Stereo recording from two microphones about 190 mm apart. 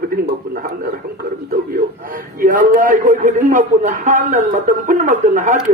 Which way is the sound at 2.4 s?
45° right (ahead or behind).